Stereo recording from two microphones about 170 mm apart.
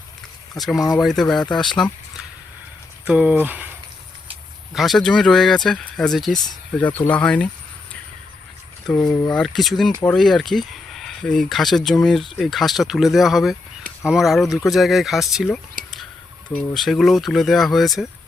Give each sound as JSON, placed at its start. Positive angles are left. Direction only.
{"t": 0.8, "sound": "speech", "side_deg": 20}
{"t": 1.0, "sound": "speech", "side_deg": 0}
{"t": 1.5, "sound": "speech", "side_deg": 25}
{"t": 3.0, "sound": "speech", "side_deg": -5}
{"t": 4.7, "sound": "speech", "side_deg": 0}
{"t": 9.0, "sound": "speech", "side_deg": 20}
{"t": 9.3, "sound": "speech", "side_deg": 0}
{"t": 15.8, "sound": "a sound", "side_deg": -55}
{"t": 16.7, "sound": "speech", "side_deg": 0}